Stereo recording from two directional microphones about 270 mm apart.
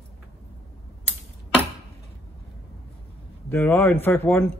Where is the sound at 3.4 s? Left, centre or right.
Centre.